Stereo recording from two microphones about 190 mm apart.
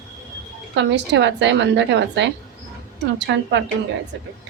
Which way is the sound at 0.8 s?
70° right (ahead or behind).